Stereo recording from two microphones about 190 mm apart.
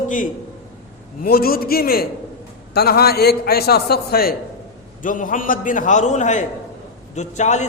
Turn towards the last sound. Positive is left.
turn(degrees=40)  # may be behind; listen again after turning